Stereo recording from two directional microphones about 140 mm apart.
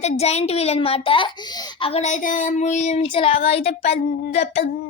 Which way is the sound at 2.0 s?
65° left (ahead or behind).